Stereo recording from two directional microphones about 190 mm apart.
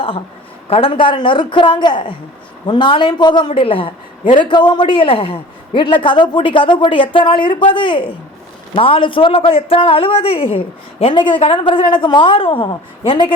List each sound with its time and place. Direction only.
0.7 s a man's voice: 30° left (ahead or behind)